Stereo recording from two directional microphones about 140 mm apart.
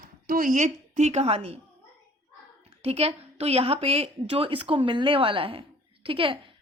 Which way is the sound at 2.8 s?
45° right (ahead or behind).